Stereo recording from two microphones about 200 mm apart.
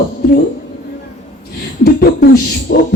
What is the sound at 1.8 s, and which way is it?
Speech, 50° left (ahead or behind).